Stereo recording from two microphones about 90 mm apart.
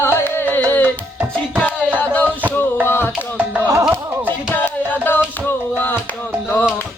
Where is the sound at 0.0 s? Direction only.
25° left (ahead or behind).